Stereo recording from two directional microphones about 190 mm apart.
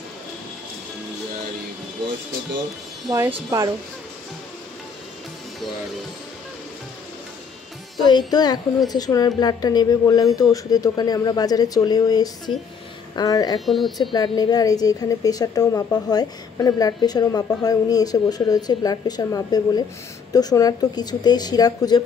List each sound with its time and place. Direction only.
3.3 s speech: 20° right (ahead or behind)
8.3 s a woman's voice: 20° left (ahead or behind)
13.7 s speech: centre (ahead or behind)
14.1 s a woman's voice: 20° left (ahead or behind)